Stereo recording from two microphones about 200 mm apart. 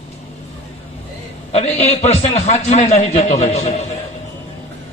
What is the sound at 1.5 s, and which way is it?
A man's voice, 35° left (ahead or behind).